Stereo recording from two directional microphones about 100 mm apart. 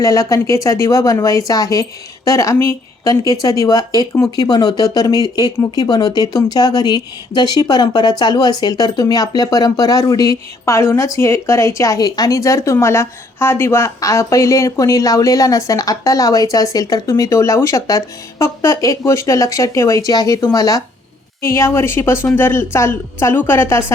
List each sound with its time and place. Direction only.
0.0 s a woman's voice: 35° left (ahead or behind)